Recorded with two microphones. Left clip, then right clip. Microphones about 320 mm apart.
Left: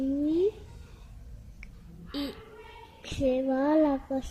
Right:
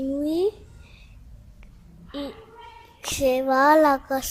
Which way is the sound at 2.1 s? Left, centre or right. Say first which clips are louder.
Right 2 dB; centre.